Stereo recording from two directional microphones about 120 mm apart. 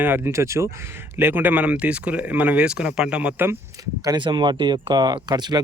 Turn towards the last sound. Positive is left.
turn(degrees=-35)  # may be behind; listen again after turning